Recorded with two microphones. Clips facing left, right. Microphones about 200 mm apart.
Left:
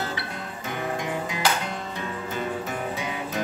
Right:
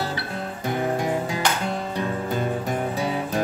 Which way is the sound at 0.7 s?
35° right (ahead or behind).